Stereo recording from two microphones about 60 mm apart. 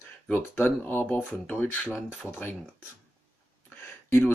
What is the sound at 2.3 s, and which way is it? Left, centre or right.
Speech, left.